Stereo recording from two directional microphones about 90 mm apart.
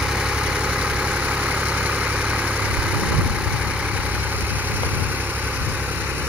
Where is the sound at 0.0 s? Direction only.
10° right (ahead or behind).